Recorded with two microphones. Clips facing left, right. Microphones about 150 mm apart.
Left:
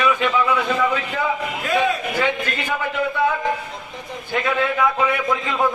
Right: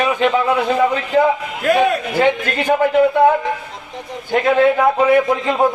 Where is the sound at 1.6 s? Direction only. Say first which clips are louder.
Right 6 dB; 60° right (ahead or behind); by 2.7 s 45° right (ahead or behind).